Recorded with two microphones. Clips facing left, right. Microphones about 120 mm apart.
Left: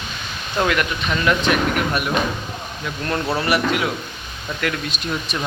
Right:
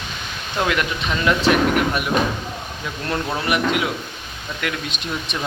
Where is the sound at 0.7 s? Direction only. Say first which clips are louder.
Left 1 dB; 20° right (ahead or behind).